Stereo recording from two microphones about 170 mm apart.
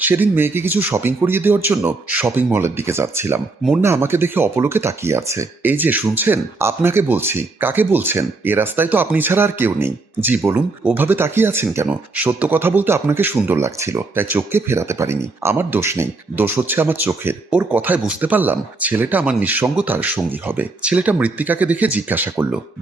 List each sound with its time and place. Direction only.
0.0 s speech: 10° right (ahead or behind)